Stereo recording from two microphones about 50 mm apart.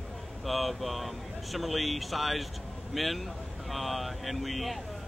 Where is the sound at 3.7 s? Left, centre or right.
Centre.